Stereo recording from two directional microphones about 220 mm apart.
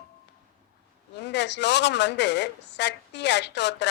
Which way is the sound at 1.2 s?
50° left (ahead or behind).